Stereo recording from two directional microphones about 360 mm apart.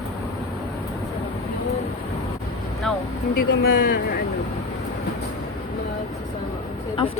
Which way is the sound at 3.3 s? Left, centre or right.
Left.